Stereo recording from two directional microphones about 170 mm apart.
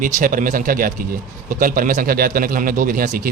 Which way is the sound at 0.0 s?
55° right (ahead or behind).